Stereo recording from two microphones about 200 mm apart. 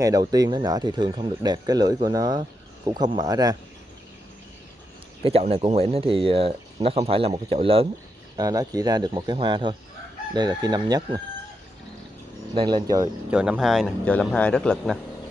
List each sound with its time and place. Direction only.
0.0 s speech: 20° right (ahead or behind)
5.2 s speech: 30° right (ahead or behind)
8.4 s speech: 20° right (ahead or behind)
12.5 s speech: 20° right (ahead or behind)
13.3 s speech: 5° right (ahead or behind)